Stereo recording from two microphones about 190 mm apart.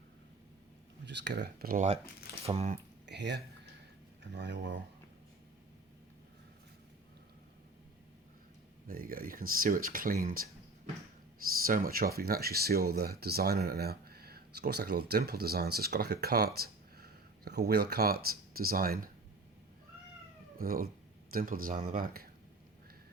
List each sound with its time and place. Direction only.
1.0 s speech: 65° right (ahead or behind); by 2.7 s 30° right (ahead or behind)
3.1 s speech: 65° right (ahead or behind)
8.9 s speech: 50° right (ahead or behind)
11.6 s speech: 50° right (ahead or behind)
20.6 s speech: 50° right (ahead or behind)